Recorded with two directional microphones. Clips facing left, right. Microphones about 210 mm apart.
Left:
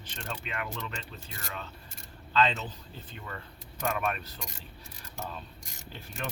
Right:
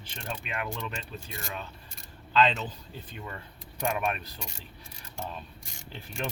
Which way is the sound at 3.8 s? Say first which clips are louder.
Right 1 dB; 15° right (ahead or behind).